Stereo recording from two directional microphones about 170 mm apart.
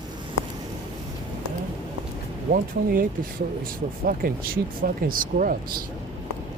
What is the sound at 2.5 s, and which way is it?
Speech, 55° right (ahead or behind).